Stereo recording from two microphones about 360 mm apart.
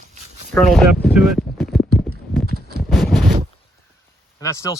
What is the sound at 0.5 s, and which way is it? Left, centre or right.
Speech, centre.